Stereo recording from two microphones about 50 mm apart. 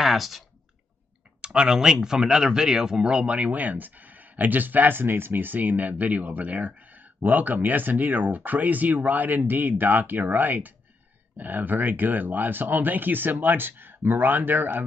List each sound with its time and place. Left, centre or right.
0.0 s clicking: centre
1.4 s speech: centre; by 14.8 s right